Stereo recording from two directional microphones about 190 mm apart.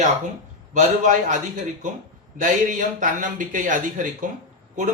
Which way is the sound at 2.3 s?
45° right (ahead or behind).